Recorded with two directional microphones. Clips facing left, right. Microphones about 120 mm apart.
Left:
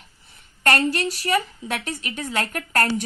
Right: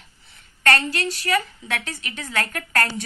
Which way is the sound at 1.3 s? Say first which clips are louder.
Left 1 dB; 20° left (ahead or behind).